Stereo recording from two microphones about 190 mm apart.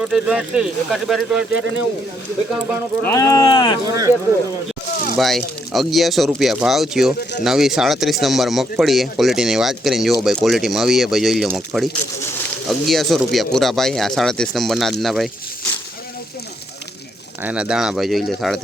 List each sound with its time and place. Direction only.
0.0 s speech: 5° right (ahead or behind)
3.0 s speech: 15° left (ahead or behind)
3.8 s speech: 20° right (ahead or behind)
5.1 s speech: centre (ahead or behind)
17.4 s speech: 5° right (ahead or behind)